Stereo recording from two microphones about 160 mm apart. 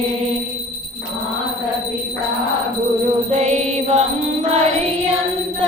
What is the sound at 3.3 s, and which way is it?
Music, 45° right (ahead or behind).